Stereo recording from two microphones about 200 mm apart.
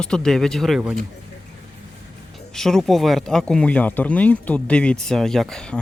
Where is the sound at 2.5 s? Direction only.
Centre (ahead or behind).